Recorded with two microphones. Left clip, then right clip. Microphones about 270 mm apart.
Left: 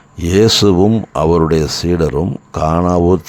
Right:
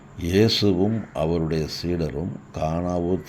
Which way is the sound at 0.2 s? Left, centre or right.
Left.